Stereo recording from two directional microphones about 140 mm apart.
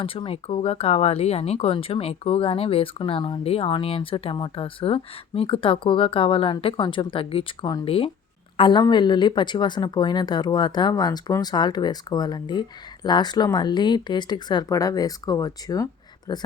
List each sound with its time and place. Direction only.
0.0 s a woman's voice: 40° left (ahead or behind)